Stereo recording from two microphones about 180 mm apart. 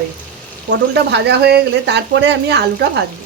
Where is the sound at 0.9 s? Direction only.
70° right (ahead or behind).